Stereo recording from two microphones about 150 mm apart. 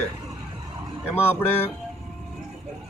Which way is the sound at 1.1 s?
15° left (ahead or behind).